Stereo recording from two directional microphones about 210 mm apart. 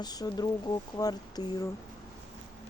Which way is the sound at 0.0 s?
20° left (ahead or behind).